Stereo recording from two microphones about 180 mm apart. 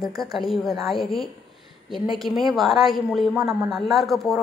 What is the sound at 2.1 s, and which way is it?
Speech, centre (ahead or behind).